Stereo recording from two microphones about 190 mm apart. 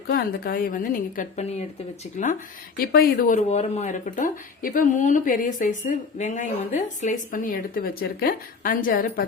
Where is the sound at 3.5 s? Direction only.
40° left (ahead or behind).